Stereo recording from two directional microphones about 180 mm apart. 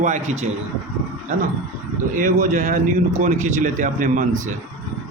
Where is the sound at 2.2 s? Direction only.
45° right (ahead or behind).